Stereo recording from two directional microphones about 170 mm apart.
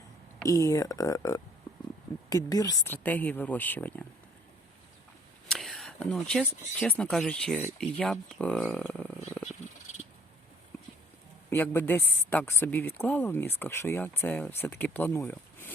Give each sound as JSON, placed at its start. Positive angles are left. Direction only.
{"t": 0.4, "sound": "speech", "side_deg": 20}
{"t": 5.5, "sound": "a sound", "side_deg": 0}
{"t": 6.7, "sound": "speech", "side_deg": 5}
{"t": 11.5, "sound": "speech", "side_deg": 15}